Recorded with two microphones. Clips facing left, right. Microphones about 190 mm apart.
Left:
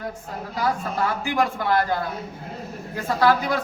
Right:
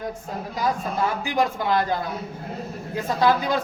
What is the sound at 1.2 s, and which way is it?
A man's voice, 20° right (ahead or behind).